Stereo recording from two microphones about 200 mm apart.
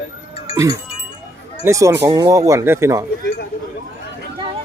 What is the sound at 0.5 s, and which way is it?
A man's voice, 15° right (ahead or behind).